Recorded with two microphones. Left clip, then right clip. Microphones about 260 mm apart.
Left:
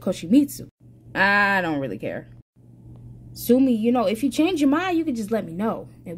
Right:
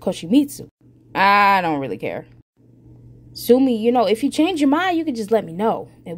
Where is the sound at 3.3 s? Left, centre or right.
Centre.